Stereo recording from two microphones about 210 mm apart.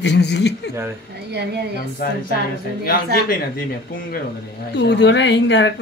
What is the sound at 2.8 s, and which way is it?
Speech, 45° left (ahead or behind).